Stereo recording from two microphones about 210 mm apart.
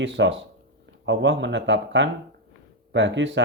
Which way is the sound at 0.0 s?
60° right (ahead or behind).